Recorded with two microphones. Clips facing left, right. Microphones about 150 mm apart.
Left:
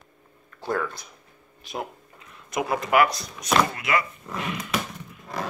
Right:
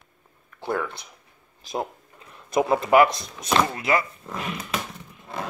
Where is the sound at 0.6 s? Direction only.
15° right (ahead or behind).